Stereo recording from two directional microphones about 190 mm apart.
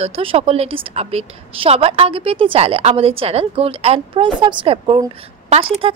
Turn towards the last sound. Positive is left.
turn(degrees=-30)  # may be behind; listen again after turning